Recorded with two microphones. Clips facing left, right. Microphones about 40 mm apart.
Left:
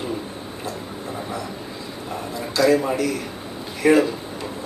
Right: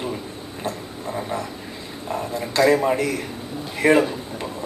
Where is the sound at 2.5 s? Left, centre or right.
Right.